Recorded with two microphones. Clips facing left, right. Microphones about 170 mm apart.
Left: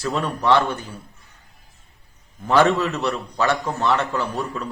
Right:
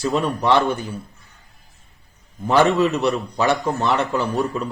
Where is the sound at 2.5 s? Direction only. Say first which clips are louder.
Right 1 dB; 15° right (ahead or behind).